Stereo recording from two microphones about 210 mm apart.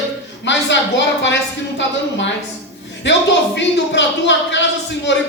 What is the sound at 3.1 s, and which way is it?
Speech, 55° left (ahead or behind).